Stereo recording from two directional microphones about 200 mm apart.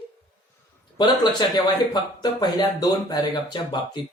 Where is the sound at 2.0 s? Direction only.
20° left (ahead or behind).